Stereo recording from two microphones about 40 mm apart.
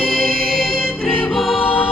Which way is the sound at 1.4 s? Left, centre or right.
Centre.